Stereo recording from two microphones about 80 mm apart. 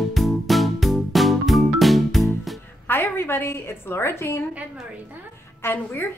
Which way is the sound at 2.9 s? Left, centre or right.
Left.